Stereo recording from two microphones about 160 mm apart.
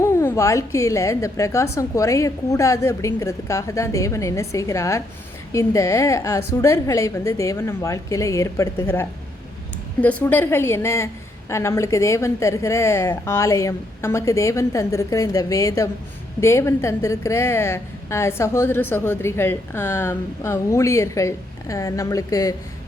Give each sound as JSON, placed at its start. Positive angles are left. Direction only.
{"t": 0.0, "sound": "a woman's voice", "side_deg": 20}